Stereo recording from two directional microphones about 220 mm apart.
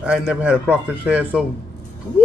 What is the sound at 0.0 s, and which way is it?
A man's voice, 5° right (ahead or behind).